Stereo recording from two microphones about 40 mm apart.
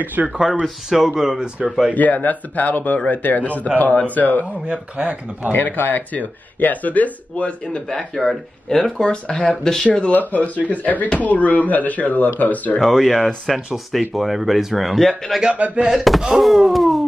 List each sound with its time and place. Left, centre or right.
0.0 s speech: right
0.8 s speech: centre
2.0 s speech: left
4.6 s speech: right
5.5 s speech: left
7.9 s speech: centre
9.0 s speech: centre
10.1 s speech: left
12.8 s speech: centre
15.5 s speech: right
16.0 s speech: centre